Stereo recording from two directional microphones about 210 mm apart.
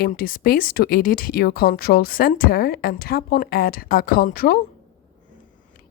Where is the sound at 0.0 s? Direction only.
45° left (ahead or behind).